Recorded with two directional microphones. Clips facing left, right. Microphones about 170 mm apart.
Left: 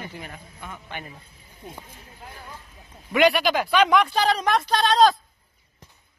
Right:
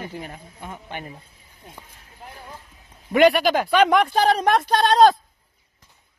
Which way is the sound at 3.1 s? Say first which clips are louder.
Right 3 dB; 45° right (ahead or behind).